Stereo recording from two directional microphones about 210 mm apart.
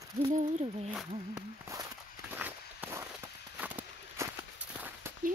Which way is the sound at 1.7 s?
10° right (ahead or behind).